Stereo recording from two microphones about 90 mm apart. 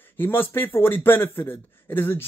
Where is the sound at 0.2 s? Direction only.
25° left (ahead or behind).